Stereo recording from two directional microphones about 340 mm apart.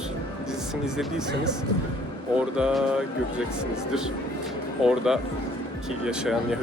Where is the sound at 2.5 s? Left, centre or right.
Centre.